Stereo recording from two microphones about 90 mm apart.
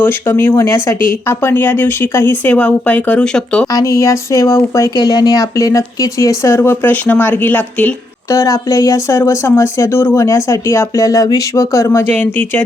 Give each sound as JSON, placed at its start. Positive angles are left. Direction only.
{"t": 0.0, "sound": "speech", "side_deg": 25}
{"t": 3.7, "sound": "speech", "side_deg": 40}
{"t": 4.9, "sound": "speech", "side_deg": 50}
{"t": 8.3, "sound": "speech", "side_deg": 40}